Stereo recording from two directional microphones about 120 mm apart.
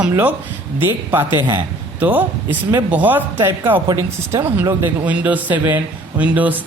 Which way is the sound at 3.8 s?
35° right (ahead or behind).